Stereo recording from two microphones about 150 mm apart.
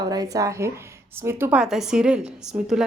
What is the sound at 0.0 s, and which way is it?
A woman's voice, 25° right (ahead or behind).